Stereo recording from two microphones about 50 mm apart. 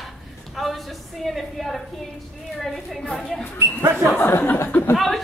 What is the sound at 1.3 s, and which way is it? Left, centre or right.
Speech, centre.